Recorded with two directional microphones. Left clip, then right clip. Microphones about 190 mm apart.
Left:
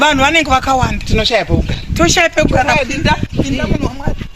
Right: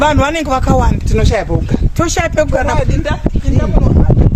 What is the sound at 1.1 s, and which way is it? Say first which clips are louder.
Speech: left 3 dB; 15° right (ahead or behind).